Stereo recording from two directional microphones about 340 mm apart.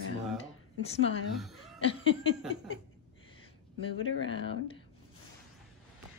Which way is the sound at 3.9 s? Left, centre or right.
Left.